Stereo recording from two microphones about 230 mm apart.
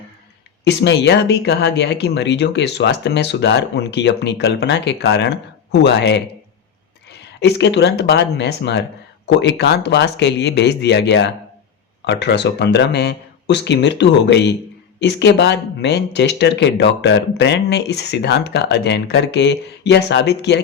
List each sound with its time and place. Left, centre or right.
0.6 s speech: left